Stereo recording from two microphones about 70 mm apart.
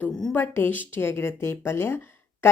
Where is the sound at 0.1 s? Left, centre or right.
Centre.